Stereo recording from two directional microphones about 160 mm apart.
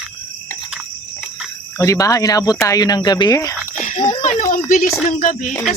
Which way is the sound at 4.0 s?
25° left (ahead or behind).